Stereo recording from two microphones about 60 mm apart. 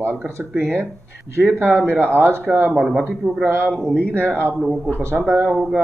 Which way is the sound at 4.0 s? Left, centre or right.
Left.